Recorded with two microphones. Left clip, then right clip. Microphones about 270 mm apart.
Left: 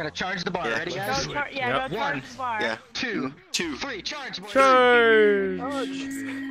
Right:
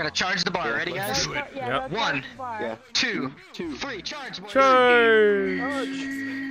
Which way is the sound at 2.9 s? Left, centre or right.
Centre.